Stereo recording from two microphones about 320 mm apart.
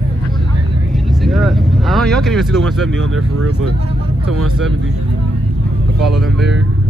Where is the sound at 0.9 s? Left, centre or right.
Centre.